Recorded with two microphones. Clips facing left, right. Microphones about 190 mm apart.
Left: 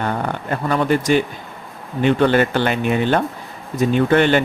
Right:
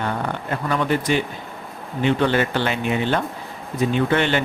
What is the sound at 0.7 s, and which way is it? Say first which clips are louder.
Speech: left 4 dB; 45° left (ahead or behind).